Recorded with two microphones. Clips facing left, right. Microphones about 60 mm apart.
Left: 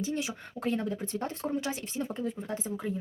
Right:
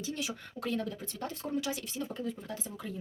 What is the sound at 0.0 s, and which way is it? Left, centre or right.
Speech, left.